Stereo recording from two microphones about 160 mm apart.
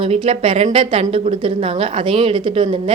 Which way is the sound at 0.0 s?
35° right (ahead or behind).